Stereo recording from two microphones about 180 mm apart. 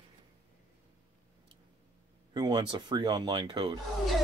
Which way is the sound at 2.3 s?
25° right (ahead or behind).